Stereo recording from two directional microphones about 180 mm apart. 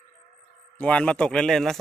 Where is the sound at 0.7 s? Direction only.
5° left (ahead or behind).